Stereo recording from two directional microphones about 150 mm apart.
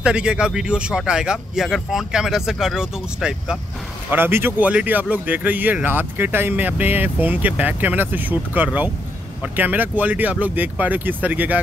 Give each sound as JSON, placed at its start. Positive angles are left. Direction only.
{"t": 0.0, "sound": "speech", "side_deg": -5}
{"t": 4.1, "sound": "speech", "side_deg": -15}